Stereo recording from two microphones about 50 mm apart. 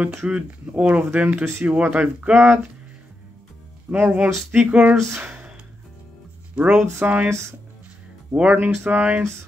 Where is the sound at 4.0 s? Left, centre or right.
Right.